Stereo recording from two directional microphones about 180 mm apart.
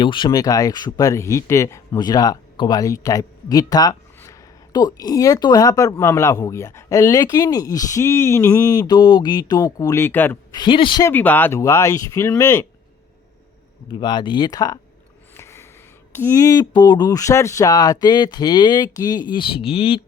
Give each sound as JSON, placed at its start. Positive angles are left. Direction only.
{"t": 0.0, "sound": "speech", "side_deg": 25}
{"t": 10.5, "sound": "speech", "side_deg": 25}
{"t": 11.1, "sound": "speech", "side_deg": 10}
{"t": 13.9, "sound": "speech", "side_deg": 25}
{"t": 15.4, "sound": "a sound", "side_deg": 15}
{"t": 16.1, "sound": "speech", "side_deg": 15}